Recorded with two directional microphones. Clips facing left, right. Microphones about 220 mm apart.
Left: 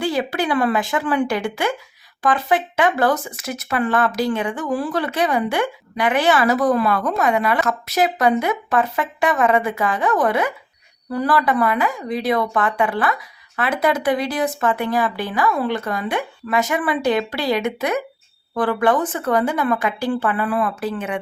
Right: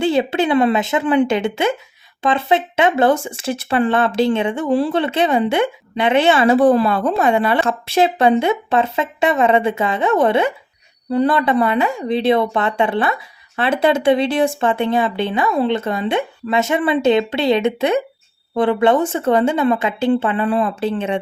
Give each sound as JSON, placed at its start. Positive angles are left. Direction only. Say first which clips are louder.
{"t": 0.0, "sound": "speech", "louder": "right 5 dB", "side_deg": -25}